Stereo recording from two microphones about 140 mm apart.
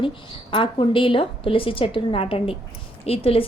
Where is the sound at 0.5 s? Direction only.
35° left (ahead or behind).